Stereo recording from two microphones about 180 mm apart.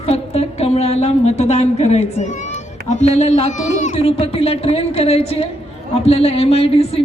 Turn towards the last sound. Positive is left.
turn(degrees=35)  # may be behind; listen again after turning